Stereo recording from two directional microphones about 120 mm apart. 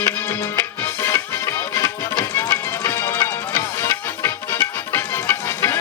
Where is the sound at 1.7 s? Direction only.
25° left (ahead or behind).